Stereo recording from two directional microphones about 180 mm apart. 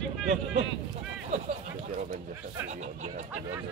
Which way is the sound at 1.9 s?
45° right (ahead or behind).